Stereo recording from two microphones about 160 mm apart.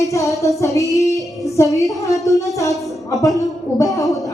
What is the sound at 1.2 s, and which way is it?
Child singing, centre (ahead or behind).